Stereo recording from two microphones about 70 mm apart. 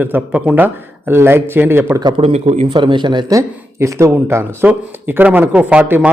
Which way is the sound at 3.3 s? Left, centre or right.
Right.